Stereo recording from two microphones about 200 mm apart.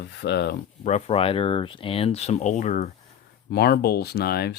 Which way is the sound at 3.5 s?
50° left (ahead or behind).